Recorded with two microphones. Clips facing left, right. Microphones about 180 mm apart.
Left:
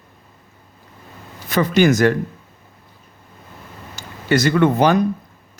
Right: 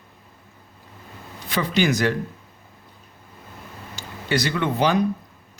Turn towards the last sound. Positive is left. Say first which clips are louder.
# left 6 dB
turn(degrees=45)  # may be behind; listen again after turning